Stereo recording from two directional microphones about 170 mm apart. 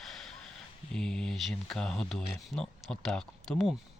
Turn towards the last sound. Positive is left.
turn(degrees=0)  # may be behind; listen again after turning